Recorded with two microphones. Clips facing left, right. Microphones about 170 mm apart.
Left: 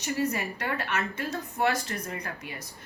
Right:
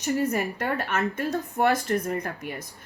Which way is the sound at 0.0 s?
50° right (ahead or behind).